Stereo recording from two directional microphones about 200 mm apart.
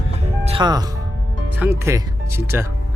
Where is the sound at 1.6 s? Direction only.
15° right (ahead or behind).